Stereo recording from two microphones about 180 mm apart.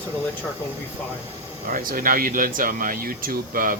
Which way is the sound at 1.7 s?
50° right (ahead or behind).